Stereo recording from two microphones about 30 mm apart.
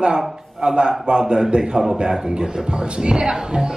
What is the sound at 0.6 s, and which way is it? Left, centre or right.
A woman's voice, right.